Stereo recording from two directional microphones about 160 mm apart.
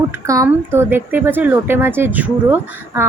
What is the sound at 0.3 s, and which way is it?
Speech, 15° right (ahead or behind).